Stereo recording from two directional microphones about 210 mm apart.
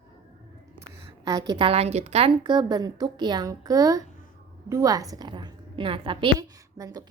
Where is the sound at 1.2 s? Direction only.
15° right (ahead or behind).